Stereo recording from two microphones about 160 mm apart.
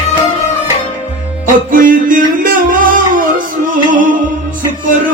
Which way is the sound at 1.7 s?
60° right (ahead or behind).